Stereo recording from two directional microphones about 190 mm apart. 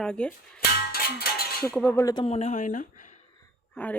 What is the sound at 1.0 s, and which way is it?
Cowbell, 55° left (ahead or behind).